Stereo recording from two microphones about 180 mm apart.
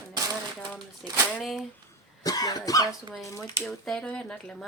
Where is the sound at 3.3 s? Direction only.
20° left (ahead or behind).